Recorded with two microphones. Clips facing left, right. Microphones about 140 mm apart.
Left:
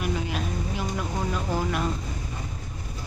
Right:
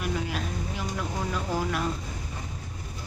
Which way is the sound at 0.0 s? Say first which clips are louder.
Left 2 dB; 5° left (ahead or behind).